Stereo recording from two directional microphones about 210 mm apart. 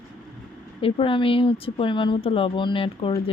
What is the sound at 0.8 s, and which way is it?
Speech, 25° left (ahead or behind).